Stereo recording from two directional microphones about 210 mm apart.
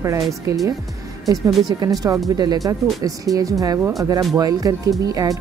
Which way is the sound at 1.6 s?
15° right (ahead or behind).